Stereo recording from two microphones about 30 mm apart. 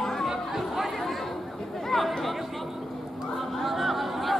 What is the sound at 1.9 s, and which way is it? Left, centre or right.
Chatter, centre.